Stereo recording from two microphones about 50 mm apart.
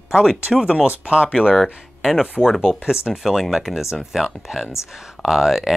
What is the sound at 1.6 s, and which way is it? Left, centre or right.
Speech, centre.